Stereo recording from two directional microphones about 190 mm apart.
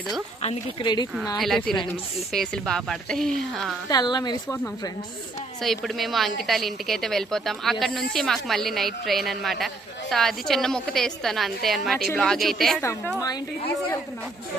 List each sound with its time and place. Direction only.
0.4 s a woman's voice: 30° left (ahead or behind)
1.4 s a woman's voice: centre (ahead or behind)
3.8 s a woman's voice: 20° left (ahead or behind)
5.6 s a woman's voice: centre (ahead or behind)